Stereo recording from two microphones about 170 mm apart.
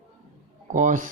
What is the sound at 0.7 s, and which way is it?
Speech, 50° right (ahead or behind).